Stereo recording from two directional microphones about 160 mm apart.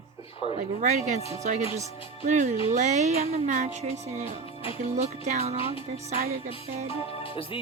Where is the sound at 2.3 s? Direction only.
50° right (ahead or behind).